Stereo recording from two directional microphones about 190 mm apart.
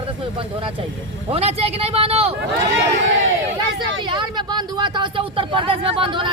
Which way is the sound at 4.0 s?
25° right (ahead or behind).